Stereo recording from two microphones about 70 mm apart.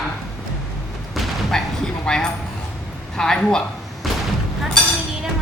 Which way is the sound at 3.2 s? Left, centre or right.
Centre.